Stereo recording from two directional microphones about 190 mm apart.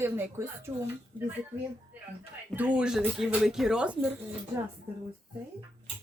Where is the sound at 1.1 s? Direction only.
10° left (ahead or behind).